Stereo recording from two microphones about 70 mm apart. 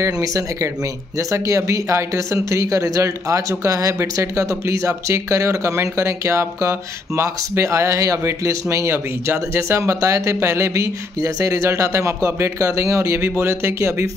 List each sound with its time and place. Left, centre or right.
0.0 s speech: right
8.6 s speech: right